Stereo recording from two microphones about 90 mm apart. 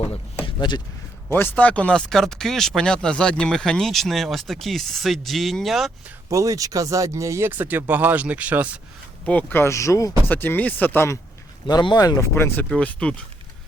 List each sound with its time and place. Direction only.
0.4 s a sound: 55° left (ahead or behind)
1.3 s speech: 20° left (ahead or behind); by 5.9 s centre (ahead or behind)
6.3 s speech: 40° right (ahead or behind); by 8.8 s 15° right (ahead or behind)
9.2 s speech: 20° left (ahead or behind); by 10.1 s 35° left (ahead or behind)
10.2 s speech: 20° left (ahead or behind)
11.6 s speech: 60° left (ahead or behind)
12.0 s speech: 40° left (ahead or behind)
12.3 s speech: 25° left (ahead or behind)
12.7 s speech: 10° left (ahead or behind)